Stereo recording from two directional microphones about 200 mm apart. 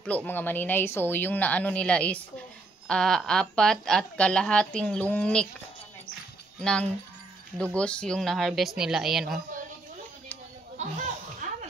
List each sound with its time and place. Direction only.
0.0 s a woman's voice: 5° left (ahead or behind)
6.6 s a woman's voice: 5° left (ahead or behind)
11.4 s a sound: 40° right (ahead or behind)